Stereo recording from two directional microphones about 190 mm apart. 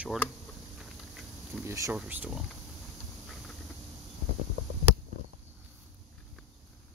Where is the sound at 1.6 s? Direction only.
15° right (ahead or behind).